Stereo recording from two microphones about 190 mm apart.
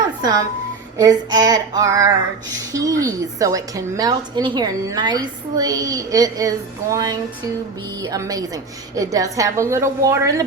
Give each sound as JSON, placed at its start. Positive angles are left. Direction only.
{"t": 0.2, "sound": "a woman's voice", "side_deg": -20}